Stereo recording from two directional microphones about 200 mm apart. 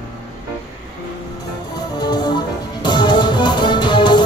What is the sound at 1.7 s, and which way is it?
Music, 20° left (ahead or behind).